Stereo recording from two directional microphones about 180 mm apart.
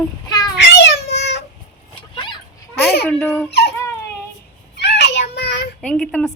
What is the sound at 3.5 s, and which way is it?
Dog, 65° left (ahead or behind).